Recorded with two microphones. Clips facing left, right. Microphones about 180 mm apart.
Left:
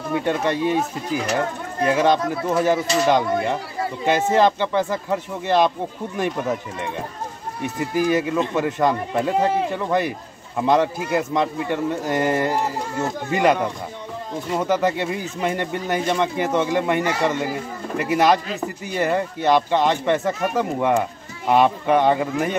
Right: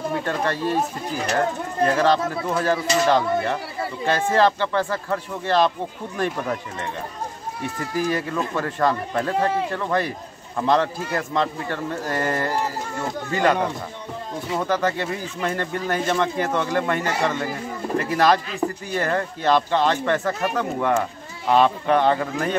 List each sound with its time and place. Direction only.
0.1 s a man's voice: 20° left (ahead or behind)
14.6 s a man's voice: 15° left (ahead or behind)